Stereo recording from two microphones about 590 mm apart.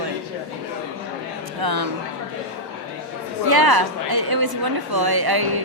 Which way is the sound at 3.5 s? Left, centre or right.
Right.